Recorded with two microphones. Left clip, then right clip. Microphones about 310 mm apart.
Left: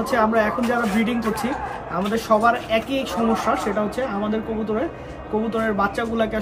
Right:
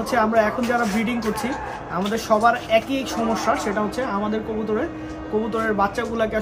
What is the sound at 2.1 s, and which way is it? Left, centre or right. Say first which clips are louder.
Speech: even; centre.